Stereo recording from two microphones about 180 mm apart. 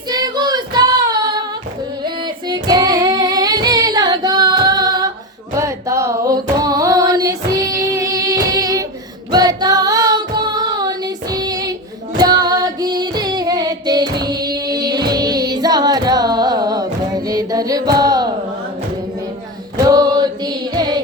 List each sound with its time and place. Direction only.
0.1 s child singing: 20° right (ahead or behind)
2.0 s female singing: 25° right (ahead or behind)
5.5 s a sound: 15° right (ahead or behind)
9.3 s music: 20° right (ahead or behind)
19.8 s choir: 20° right (ahead or behind)